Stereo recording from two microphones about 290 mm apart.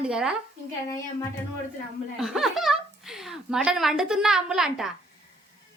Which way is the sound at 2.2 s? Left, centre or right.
Centre.